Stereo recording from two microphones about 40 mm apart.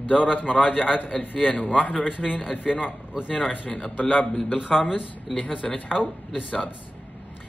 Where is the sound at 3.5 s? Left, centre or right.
Left.